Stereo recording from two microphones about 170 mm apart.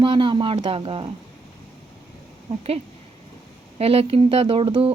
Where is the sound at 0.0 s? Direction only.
30° right (ahead or behind).